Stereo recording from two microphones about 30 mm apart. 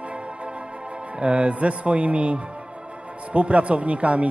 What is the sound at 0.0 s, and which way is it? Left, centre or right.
Speech, right.